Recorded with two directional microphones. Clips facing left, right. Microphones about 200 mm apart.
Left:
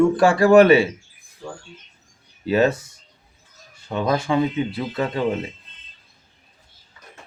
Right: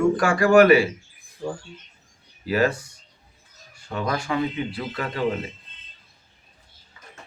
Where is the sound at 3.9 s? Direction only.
25° left (ahead or behind).